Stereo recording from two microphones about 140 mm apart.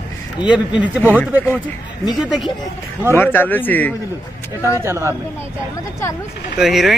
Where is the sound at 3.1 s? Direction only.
15° left (ahead or behind).